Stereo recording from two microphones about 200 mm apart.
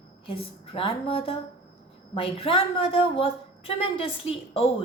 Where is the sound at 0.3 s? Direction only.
30° left (ahead or behind).